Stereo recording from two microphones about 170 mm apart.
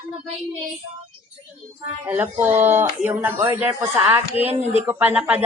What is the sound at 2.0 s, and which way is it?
Speech, 10° right (ahead or behind).